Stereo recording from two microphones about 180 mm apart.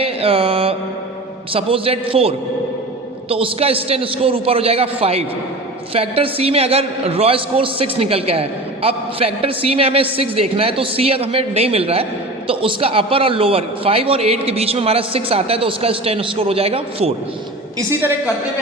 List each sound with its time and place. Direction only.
0.0 s mantra: 30° right (ahead or behind)
1.5 s a man's voice: 30° right (ahead or behind)
17.7 s a woman's voice: 15° right (ahead or behind)